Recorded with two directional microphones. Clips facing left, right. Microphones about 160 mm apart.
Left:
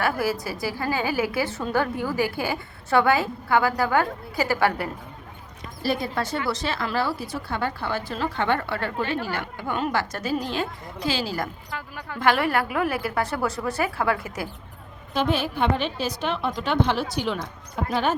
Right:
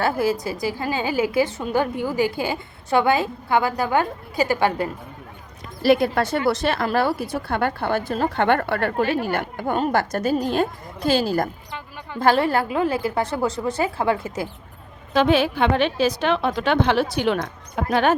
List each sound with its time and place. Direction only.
0.0 s a woman's voice: 20° right (ahead or behind)
5.8 s a woman's voice: 70° right (ahead or behind); by 11.4 s 50° right (ahead or behind)
12.2 s a woman's voice: 30° right (ahead or behind)
15.1 s a woman's voice: 90° right; by 17.9 s 75° right (ahead or behind)